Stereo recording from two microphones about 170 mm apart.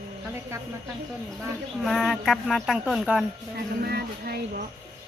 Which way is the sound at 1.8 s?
Centre (ahead or behind).